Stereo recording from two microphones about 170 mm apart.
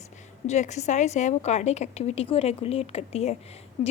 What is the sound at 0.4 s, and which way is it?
A woman's voice, 40° left (ahead or behind).